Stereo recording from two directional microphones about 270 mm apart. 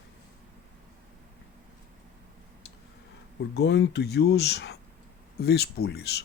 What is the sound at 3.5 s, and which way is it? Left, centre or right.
Speech, left.